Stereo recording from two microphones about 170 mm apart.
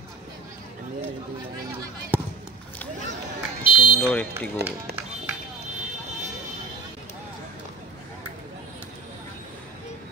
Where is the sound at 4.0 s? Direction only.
10° left (ahead or behind).